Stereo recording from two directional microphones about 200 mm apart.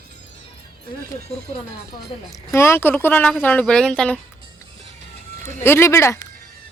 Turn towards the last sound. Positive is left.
turn(degrees=15)  # may be behind; listen again after turning